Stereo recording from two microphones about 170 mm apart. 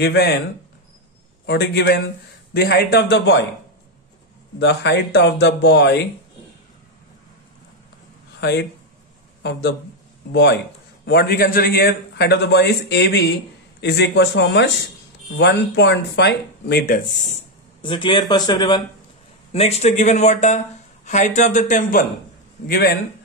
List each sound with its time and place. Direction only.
0.0 s a man's voice: 75° left (ahead or behind)
1.4 s a man's voice: 80° left
4.6 s speech: 90° left
8.4 s a man's voice: 80° left
11.1 s a man's voice: 65° left (ahead or behind); by 13.3 s 85° left
13.7 s a man's voice: 75° left (ahead or behind)
17.8 s speech: 30° left (ahead or behind)
19.5 s speech: 40° left (ahead or behind)
22.7 s a man's voice: 70° left (ahead or behind)